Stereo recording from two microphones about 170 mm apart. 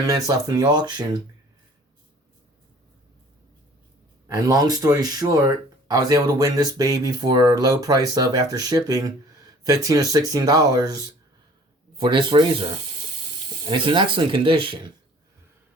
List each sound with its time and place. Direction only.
0.3 s speech: 20° right (ahead or behind)
4.4 s speech: 20° right (ahead or behind)
13.7 s speech: 30° right (ahead or behind)